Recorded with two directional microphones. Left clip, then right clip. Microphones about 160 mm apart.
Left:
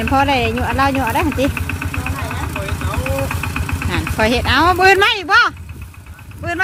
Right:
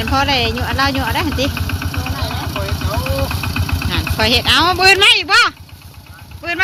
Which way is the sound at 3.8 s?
50° left (ahead or behind).